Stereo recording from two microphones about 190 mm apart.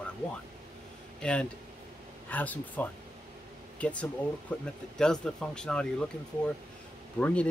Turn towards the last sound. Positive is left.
turn(degrees=5)  # may be behind; listen again after turning